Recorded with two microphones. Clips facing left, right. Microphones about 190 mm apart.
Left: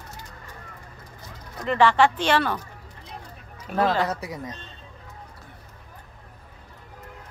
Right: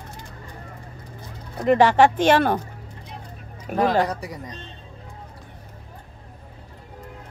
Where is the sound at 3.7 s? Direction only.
15° right (ahead or behind).